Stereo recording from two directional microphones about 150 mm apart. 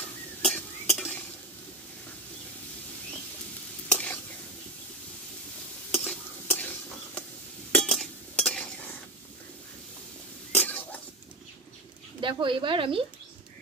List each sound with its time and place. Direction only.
0.4 s stir: 5° left (ahead or behind)
3.9 s stir: 10° left (ahead or behind)
5.9 s stir: 10° left (ahead or behind)
7.7 s cutlery: 5° left (ahead or behind)
10.5 s a sound: 10° left (ahead or behind)
12.2 s speech: 35° right (ahead or behind)